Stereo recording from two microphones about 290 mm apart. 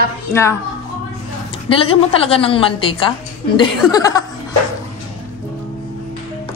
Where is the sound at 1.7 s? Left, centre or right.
Centre.